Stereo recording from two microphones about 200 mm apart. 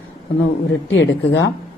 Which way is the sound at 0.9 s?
65° left (ahead or behind).